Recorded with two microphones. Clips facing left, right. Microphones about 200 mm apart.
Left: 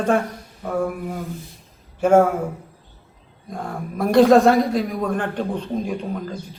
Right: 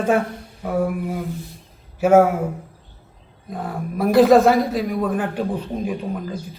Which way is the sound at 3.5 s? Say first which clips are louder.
Right 2 dB; 5° right (ahead or behind).